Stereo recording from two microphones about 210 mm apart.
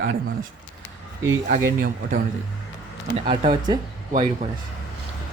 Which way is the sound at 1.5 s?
45° right (ahead or behind).